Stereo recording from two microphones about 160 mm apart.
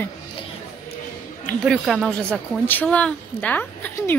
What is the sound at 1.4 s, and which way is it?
A woman's voice, centre (ahead or behind).